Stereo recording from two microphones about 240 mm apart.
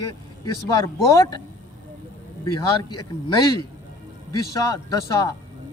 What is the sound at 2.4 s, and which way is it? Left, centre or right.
Speech, centre.